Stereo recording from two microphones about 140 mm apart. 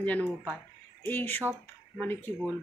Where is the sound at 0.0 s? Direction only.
10° left (ahead or behind).